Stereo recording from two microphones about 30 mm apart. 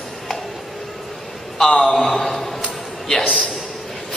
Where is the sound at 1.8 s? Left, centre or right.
Centre.